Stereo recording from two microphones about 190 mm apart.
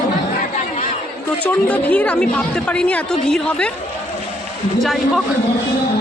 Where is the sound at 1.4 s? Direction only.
10° left (ahead or behind).